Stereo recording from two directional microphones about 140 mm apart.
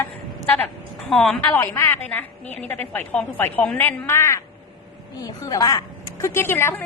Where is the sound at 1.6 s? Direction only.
20° left (ahead or behind).